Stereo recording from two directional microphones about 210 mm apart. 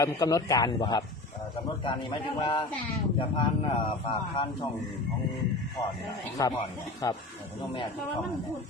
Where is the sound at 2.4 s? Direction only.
20° left (ahead or behind).